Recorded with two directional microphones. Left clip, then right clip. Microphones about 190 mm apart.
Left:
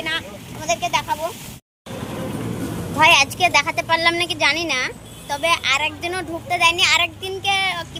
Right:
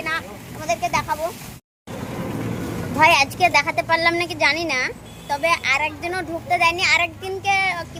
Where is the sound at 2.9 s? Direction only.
5° right (ahead or behind).